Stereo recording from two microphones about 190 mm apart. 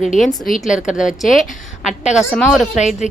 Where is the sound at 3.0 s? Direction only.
40° left (ahead or behind).